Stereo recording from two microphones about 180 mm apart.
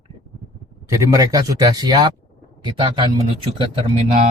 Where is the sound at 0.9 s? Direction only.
15° right (ahead or behind).